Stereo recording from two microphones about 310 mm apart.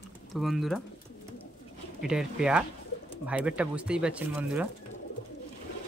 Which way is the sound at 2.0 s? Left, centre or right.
Centre.